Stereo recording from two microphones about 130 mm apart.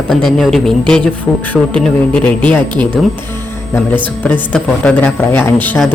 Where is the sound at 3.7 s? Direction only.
15° left (ahead or behind).